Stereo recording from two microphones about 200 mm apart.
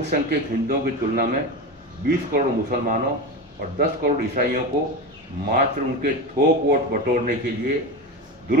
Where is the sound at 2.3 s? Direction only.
45° right (ahead or behind).